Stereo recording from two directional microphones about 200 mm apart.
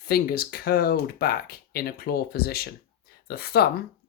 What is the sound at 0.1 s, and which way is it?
Speech, 50° left (ahead or behind).